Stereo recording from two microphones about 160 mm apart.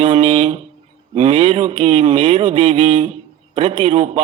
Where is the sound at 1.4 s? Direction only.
40° right (ahead or behind).